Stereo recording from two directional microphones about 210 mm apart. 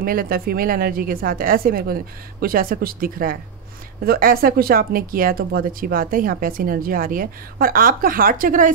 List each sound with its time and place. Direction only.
0.0 s speech: 45° right (ahead or behind)